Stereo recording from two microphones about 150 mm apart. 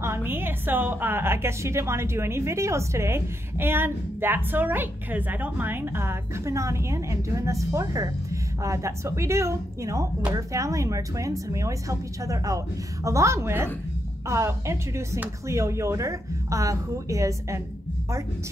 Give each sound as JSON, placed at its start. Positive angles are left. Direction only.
{"t": 0.0, "sound": "a woman's voice", "side_deg": -15}